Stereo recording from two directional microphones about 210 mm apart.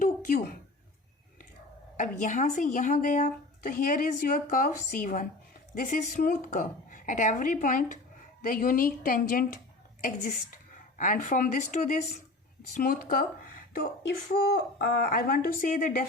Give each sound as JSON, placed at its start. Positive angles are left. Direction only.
{"t": 0.0, "sound": "a sound", "side_deg": 40}
{"t": 2.0, "sound": "speech", "side_deg": 35}
{"t": 10.9, "sound": "speech", "side_deg": 40}